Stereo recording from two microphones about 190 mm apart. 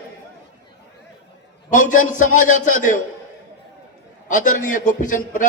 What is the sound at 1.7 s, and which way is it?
A man's voice, 40° left (ahead or behind).